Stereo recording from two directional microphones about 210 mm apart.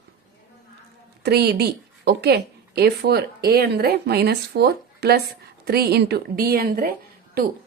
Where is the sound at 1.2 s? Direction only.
50° right (ahead or behind).